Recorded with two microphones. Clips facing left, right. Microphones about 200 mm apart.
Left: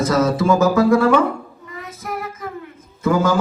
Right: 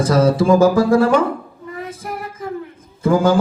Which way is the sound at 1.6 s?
30° right (ahead or behind).